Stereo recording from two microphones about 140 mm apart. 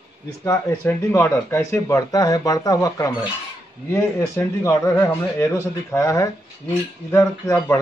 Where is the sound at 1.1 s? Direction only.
20° left (ahead or behind).